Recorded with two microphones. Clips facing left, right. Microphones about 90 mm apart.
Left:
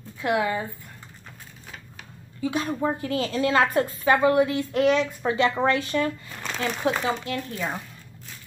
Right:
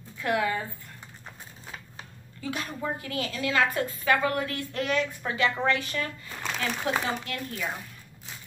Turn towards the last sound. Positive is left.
turn(degrees=20)  # may be behind; listen again after turning